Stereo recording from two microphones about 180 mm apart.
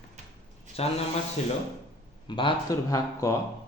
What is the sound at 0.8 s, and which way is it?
Speech, 35° left (ahead or behind).